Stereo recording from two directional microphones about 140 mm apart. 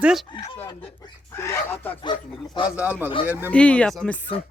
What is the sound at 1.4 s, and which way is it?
Speech, 15° left (ahead or behind).